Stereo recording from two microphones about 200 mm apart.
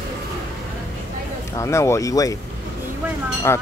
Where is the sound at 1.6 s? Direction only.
15° left (ahead or behind).